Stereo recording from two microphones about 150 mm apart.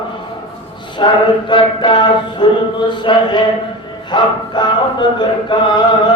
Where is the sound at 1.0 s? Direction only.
30° left (ahead or behind).